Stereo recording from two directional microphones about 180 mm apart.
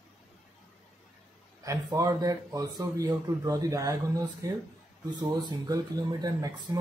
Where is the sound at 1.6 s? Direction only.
20° right (ahead or behind).